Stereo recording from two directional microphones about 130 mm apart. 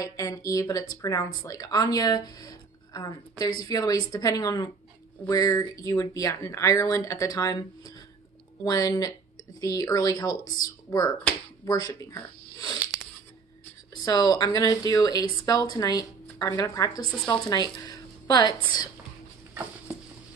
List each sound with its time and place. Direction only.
0.0 s speech: 25° left (ahead or behind)
14.0 s a woman's voice: 30° left (ahead or behind)